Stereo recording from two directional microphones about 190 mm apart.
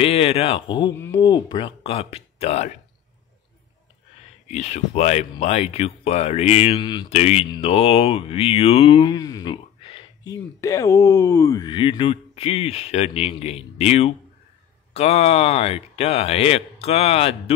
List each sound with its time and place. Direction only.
0.0 s speech: 30° left (ahead or behind)
4.5 s speech: 35° left (ahead or behind)